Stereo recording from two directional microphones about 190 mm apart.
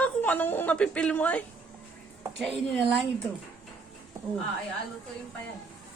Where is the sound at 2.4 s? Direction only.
Centre (ahead or behind).